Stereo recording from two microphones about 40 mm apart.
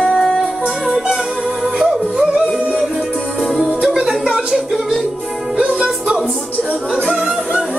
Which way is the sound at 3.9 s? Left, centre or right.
Centre.